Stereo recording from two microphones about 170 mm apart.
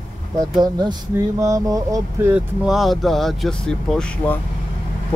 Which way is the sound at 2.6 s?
Centre (ahead or behind).